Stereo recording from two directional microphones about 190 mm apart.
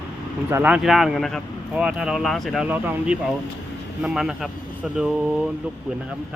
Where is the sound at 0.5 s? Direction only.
5° right (ahead or behind).